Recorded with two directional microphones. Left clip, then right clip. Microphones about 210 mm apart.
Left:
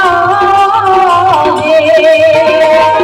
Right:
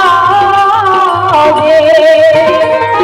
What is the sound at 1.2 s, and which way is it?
Music, 40° left (ahead or behind).